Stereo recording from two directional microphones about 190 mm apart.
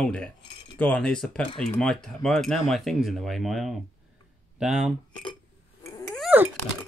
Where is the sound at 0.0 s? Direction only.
5° left (ahead or behind).